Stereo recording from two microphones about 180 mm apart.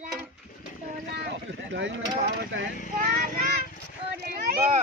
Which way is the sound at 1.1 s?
75° right (ahead or behind).